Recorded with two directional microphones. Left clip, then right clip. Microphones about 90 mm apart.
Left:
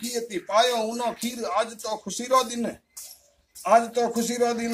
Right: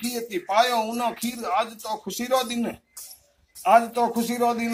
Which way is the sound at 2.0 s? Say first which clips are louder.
Left 2 dB; 40° left (ahead or behind).